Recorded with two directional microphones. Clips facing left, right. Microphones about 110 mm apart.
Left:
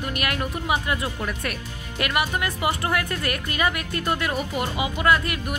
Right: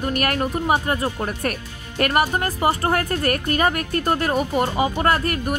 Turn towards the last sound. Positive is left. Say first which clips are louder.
# right 1 dB
turn(degrees=-45)  # may be behind; listen again after turning